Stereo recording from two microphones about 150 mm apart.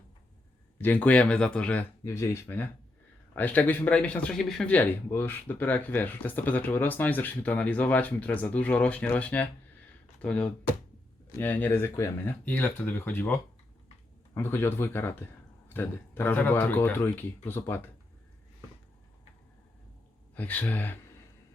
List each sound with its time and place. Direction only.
0.8 s speech: 10° left (ahead or behind)
20.3 s speech: 10° left (ahead or behind)